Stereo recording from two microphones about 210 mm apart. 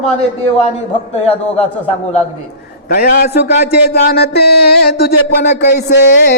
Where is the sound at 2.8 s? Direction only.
50° left (ahead or behind).